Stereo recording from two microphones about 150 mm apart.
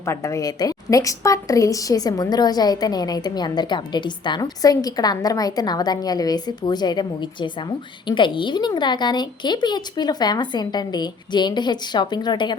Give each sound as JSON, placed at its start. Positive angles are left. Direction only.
{"t": 0.0, "sound": "a woman's voice", "side_deg": 20}